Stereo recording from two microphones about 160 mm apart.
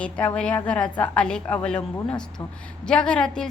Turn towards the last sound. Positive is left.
turn(degrees=5)  # may be behind; listen again after turning